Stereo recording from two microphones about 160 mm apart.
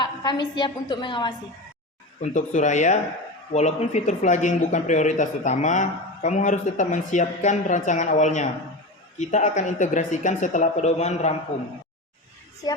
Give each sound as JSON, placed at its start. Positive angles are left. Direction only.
{"t": 0.0, "sound": "a woman's voice", "side_deg": 30}
{"t": 2.2, "sound": "speech", "side_deg": 50}